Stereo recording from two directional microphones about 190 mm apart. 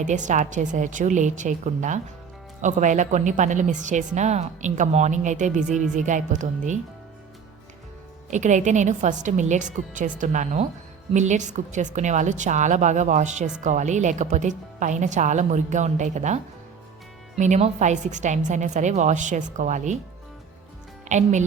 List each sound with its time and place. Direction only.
0.0 s a woman's voice: 40° right (ahead or behind)
8.3 s a woman's voice: 40° right (ahead or behind)
21.1 s a woman's voice: 40° right (ahead or behind)